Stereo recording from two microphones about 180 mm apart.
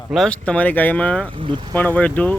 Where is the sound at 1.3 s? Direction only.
25° right (ahead or behind).